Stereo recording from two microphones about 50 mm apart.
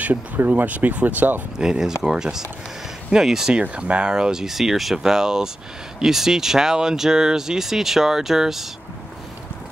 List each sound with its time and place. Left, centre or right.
0.5 s speech: right
1.6 s speech: centre
3.6 s speech: right; by 8.6 s centre